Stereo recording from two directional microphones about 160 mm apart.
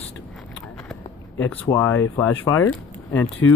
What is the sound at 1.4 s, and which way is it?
Speech, 10° left (ahead or behind).